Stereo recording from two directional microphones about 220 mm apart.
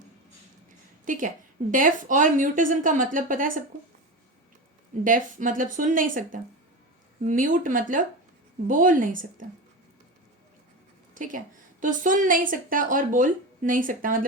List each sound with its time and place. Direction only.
1.0 s a woman's voice: 35° right (ahead or behind)
5.0 s a woman's voice: 35° right (ahead or behind)
11.1 s a woman's voice: 35° right (ahead or behind)